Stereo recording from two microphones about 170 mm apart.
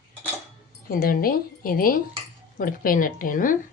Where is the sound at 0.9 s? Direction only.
60° left (ahead or behind).